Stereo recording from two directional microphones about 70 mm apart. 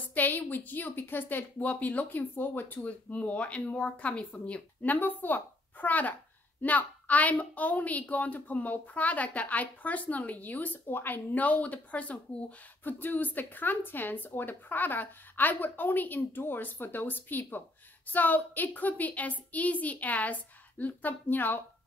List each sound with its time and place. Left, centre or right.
0.1 s a woman's voice: left